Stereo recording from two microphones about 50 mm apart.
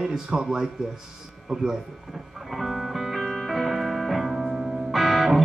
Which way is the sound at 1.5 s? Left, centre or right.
Centre.